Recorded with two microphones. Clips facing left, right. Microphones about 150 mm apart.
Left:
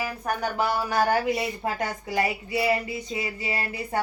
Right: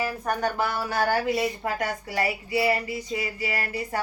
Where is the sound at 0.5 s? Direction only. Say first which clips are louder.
Left 2 dB; 15° left (ahead or behind).